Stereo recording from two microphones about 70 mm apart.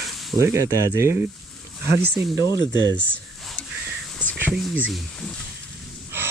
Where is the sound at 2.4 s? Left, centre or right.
Left.